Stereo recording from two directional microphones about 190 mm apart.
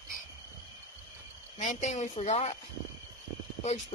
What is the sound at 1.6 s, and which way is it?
Speech, 40° left (ahead or behind).